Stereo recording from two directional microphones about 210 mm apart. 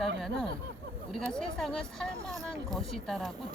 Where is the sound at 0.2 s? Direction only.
Centre (ahead or behind).